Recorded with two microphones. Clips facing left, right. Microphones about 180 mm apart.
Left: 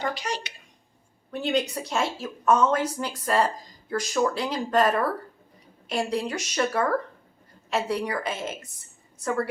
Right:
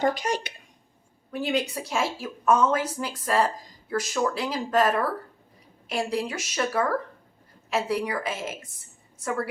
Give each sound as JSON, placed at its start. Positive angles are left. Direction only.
{"t": 0.0, "sound": "speech", "side_deg": -50}
{"t": 1.3, "sound": "speech", "side_deg": -5}